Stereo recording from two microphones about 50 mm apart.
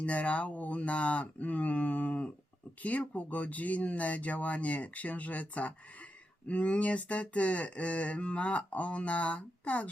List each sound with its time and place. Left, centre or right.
0.0 s speech: left